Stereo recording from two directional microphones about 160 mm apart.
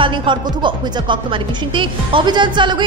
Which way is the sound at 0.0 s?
30° right (ahead or behind).